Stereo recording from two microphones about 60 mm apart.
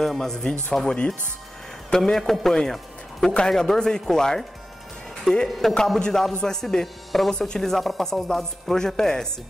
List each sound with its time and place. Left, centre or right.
0.0 s a man's voice: centre
5.9 s a man's voice: centre